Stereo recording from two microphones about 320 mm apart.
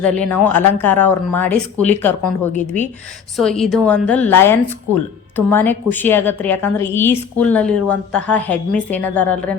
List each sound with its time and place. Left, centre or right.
0.0 s a woman's voice: centre